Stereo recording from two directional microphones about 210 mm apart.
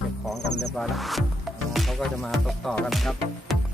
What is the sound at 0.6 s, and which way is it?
Music, centre (ahead or behind).